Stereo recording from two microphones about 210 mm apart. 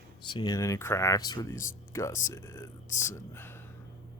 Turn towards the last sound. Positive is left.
turn(degrees=10)  # may be behind; listen again after turning